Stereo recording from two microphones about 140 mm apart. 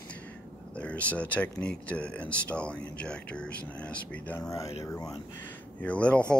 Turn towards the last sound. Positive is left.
turn(degrees=10)  # may be behind; listen again after turning